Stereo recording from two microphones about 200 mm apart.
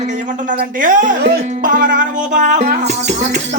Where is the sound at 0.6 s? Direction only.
40° right (ahead or behind).